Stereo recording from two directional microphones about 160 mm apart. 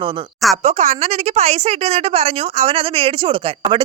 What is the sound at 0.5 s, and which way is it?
A woman's voice, 40° right (ahead or behind).